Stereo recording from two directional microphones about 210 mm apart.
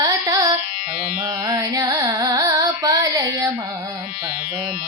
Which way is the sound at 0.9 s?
45° left (ahead or behind).